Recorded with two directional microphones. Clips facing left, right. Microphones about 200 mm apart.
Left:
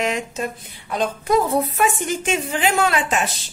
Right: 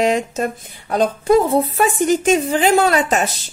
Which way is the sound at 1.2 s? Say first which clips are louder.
Right 4 dB; 25° right (ahead or behind).